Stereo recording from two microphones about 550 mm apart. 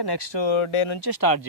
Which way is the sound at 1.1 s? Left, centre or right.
Left.